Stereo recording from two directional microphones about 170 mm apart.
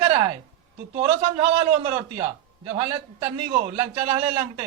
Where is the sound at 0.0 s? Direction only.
30° right (ahead or behind).